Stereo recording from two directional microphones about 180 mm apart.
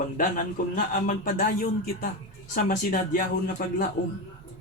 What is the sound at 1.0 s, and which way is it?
A man's voice, 50° left (ahead or behind).